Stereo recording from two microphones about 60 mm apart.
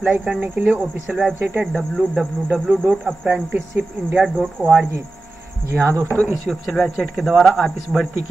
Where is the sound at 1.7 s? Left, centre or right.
Centre.